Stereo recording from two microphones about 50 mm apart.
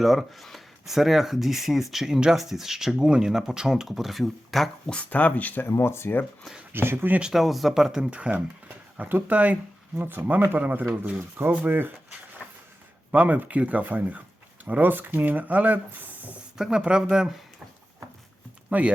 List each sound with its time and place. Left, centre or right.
0.0 s speech: centre
4.9 s speech: left
5.6 s speech: left
6.7 s speech: right
7.3 s speech: centre
8.1 s speech: right
10.0 s speech: right
11.2 s speech: right
13.1 s speech: right
16.6 s speech: centre
18.7 s speech: right